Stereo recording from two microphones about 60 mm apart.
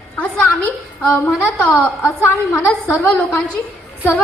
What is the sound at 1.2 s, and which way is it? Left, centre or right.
A woman's voice, left.